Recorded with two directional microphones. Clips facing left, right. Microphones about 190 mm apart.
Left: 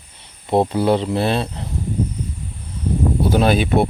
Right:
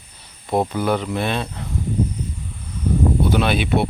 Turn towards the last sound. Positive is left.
turn(degrees=45)  # may be behind; listen again after turning